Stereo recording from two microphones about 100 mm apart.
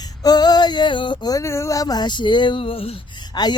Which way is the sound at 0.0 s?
40° left (ahead or behind).